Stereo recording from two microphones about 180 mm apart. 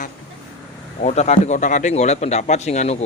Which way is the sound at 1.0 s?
40° left (ahead or behind).